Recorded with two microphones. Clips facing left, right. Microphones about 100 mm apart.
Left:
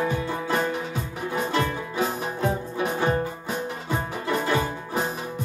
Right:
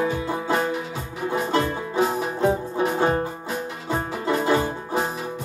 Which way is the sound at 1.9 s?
25° right (ahead or behind).